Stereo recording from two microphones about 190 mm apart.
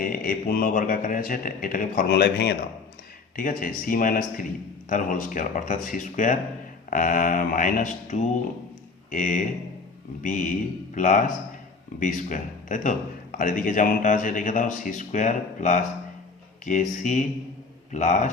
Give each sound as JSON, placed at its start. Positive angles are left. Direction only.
{"t": 0.0, "sound": "speech", "side_deg": 50}
{"t": 3.3, "sound": "speech", "side_deg": 45}